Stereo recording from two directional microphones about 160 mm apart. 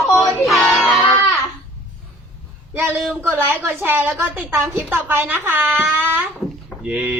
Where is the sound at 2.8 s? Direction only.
5° right (ahead or behind).